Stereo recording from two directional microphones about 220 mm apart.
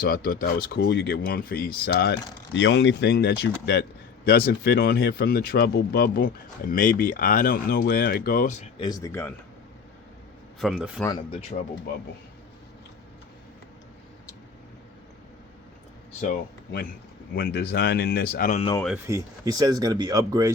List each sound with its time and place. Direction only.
0.0 s speech: 40° left (ahead or behind)
8.8 s speech: 15° left (ahead or behind)
10.6 s a man's voice: centre (ahead or behind)
11.5 s speech: 35° left (ahead or behind)
17.3 s speech: 45° left (ahead or behind)
19.0 s speech: 15° right (ahead or behind)